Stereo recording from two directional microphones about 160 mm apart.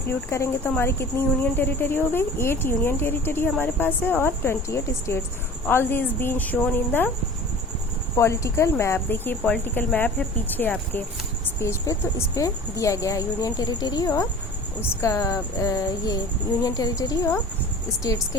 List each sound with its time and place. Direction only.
0.1 s a woman's voice: 15° left (ahead or behind)
8.1 s a woman's voice: 20° left (ahead or behind)